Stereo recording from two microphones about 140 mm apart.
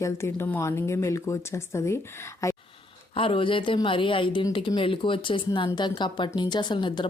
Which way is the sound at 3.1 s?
40° left (ahead or behind).